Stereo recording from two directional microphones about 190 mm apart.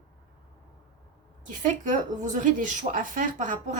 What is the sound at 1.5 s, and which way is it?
Speech, 40° right (ahead or behind).